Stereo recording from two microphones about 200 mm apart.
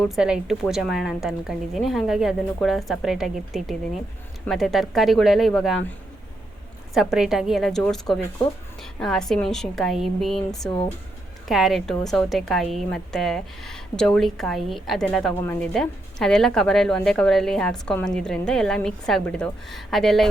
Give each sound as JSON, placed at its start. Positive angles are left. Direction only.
{"t": 0.0, "sound": "a woman's voice", "side_deg": 0}
{"t": 6.9, "sound": "a woman's voice", "side_deg": 0}